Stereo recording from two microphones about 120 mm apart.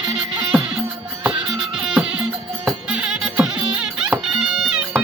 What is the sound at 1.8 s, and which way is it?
Music, 10° right (ahead or behind).